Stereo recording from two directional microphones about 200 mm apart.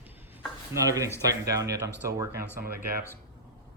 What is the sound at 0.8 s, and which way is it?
Speech, 15° right (ahead or behind).